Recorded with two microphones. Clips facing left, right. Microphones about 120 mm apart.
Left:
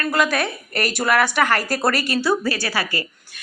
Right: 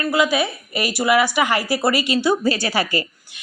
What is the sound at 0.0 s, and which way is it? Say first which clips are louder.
Speech: right 2 dB; 10° right (ahead or behind).